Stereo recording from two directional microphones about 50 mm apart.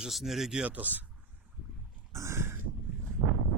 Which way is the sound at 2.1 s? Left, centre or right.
Right.